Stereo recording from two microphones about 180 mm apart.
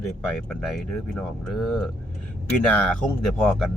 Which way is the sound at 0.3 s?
Centre (ahead or behind).